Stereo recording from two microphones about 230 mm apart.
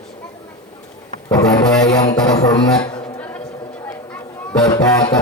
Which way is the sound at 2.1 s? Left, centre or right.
Centre.